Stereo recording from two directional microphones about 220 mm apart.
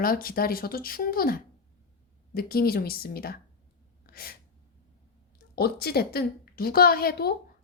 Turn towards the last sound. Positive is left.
turn(degrees=45)  # may be behind; listen again after turning